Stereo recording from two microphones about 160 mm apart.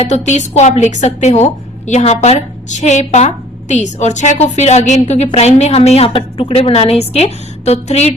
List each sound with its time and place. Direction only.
0.0 s a woman's voice: 45° left (ahead or behind)